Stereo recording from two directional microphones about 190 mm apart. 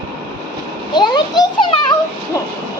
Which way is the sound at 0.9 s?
20° left (ahead or behind).